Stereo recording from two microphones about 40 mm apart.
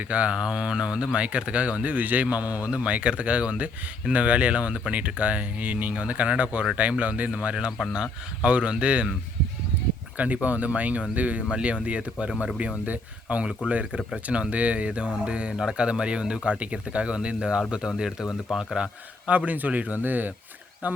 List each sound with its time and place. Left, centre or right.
0.1 s speech: right
0.3 s speech: right
7.9 s speech: right
10.2 s speech: right; by 18.9 s centre
19.3 s speech: right